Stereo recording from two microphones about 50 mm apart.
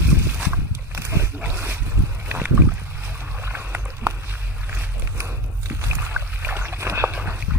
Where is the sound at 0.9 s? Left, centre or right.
Right.